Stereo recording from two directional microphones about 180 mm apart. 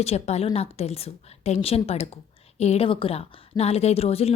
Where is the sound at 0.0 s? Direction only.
35° left (ahead or behind).